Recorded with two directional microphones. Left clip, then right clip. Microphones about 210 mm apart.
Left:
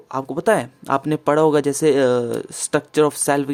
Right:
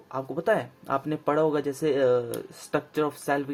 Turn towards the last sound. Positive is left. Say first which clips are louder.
# left 9 dB
turn(degrees=45)  # may be behind; listen again after turning